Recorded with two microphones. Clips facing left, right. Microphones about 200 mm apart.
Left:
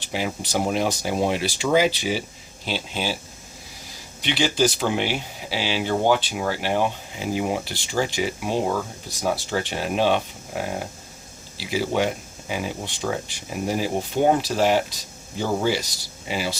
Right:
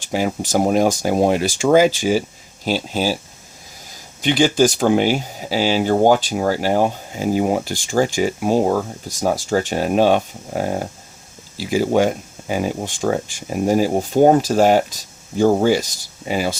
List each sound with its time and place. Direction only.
0.1 s speech: 45° right (ahead or behind)
4.2 s speech: 45° right (ahead or behind)